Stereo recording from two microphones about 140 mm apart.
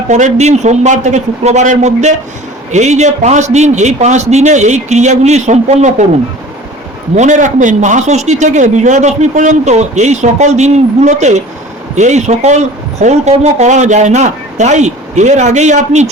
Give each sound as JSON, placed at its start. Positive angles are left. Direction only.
{"t": 0.1, "sound": "speech", "side_deg": -55}
{"t": 7.2, "sound": "a man's voice", "side_deg": -60}